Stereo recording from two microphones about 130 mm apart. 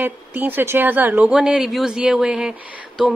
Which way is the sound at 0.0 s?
15° right (ahead or behind).